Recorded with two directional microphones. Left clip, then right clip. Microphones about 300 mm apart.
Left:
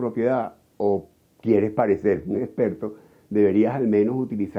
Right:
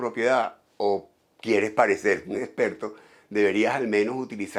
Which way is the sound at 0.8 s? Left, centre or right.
Right.